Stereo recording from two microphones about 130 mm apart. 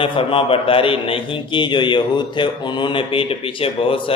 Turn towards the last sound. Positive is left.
turn(degrees=45)  # may be behind; listen again after turning